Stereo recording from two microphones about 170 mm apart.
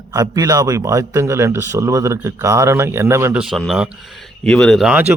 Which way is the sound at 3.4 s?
Centre (ahead or behind).